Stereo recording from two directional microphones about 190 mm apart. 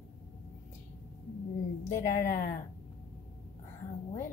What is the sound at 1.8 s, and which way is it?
Speech, 40° left (ahead or behind).